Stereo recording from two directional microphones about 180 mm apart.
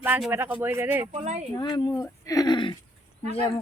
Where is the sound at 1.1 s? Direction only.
40° right (ahead or behind).